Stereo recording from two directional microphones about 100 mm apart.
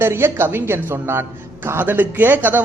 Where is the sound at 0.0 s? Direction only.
25° right (ahead or behind).